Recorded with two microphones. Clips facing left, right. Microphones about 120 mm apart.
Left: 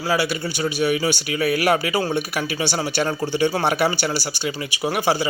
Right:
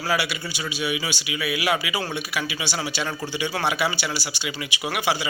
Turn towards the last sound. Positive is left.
turn(degrees=40)  # may be behind; listen again after turning